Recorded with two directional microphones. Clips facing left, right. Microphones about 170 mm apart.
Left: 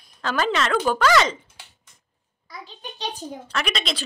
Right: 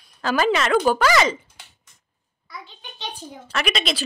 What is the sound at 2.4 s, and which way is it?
Speech, 40° left (ahead or behind).